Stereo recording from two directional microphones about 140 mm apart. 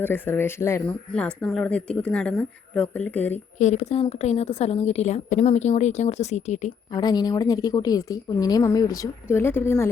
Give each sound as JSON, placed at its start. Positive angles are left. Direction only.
{"t": 0.0, "sound": "speech", "side_deg": 15}
{"t": 1.4, "sound": "speech", "side_deg": 5}
{"t": 3.3, "sound": "a woman's voice", "side_deg": 55}
{"t": 6.9, "sound": "a woman's voice", "side_deg": 30}